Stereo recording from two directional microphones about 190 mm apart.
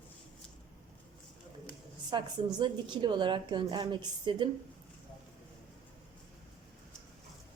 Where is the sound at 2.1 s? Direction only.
25° right (ahead or behind).